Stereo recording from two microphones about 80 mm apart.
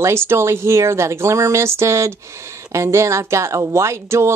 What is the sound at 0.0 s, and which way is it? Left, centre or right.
Speech, right.